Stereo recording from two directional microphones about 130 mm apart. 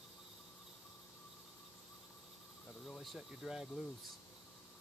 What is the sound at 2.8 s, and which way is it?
Speech, centre (ahead or behind).